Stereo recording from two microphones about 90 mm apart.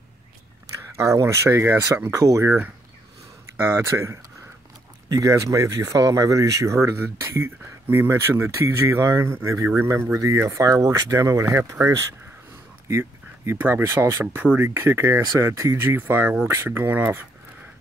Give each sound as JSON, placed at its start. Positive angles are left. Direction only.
{"t": 0.9, "sound": "speech", "side_deg": -30}
{"t": 13.5, "sound": "speech", "side_deg": -25}
{"t": 15.0, "sound": "speech", "side_deg": -35}